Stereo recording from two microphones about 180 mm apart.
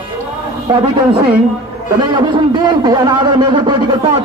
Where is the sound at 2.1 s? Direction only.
25° right (ahead or behind).